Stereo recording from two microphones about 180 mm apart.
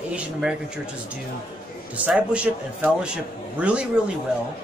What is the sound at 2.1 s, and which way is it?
A man's voice, 5° right (ahead or behind).